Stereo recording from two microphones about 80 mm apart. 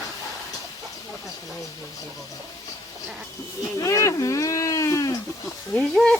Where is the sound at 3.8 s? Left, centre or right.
Left.